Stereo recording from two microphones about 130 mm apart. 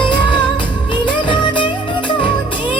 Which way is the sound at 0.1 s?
40° left (ahead or behind).